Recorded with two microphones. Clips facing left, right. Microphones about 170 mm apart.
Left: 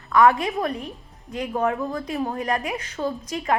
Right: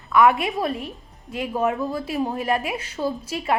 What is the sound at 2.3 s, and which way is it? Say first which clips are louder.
Speech: right 2 dB; 25° right (ahead or behind).